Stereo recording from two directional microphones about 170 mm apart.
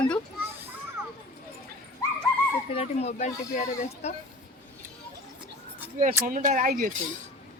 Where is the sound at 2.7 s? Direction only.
40° left (ahead or behind).